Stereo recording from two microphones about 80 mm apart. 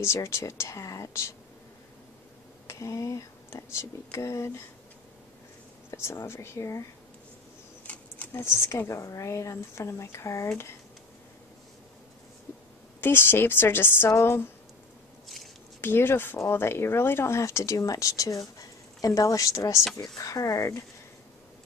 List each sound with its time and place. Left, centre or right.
0.0 s a woman's voice: left
2.7 s a woman's voice: left
5.9 s a woman's voice: left
7.8 s a sound: centre
8.3 s a woman's voice: left
13.0 s a woman's voice: left
15.8 s a woman's voice: left